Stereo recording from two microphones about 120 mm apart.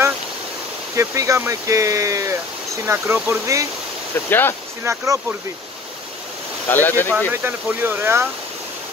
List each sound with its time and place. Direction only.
0.9 s speech: 25° right (ahead or behind)
4.3 s speech: 15° left (ahead or behind)
4.8 s speech: 25° right (ahead or behind)
6.7 s speech: 15° left (ahead or behind)
7.4 s speech: 20° right (ahead or behind)